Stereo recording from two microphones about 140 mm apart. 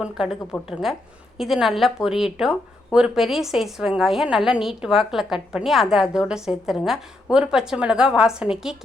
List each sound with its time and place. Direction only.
0.0 s speech: 5° right (ahead or behind)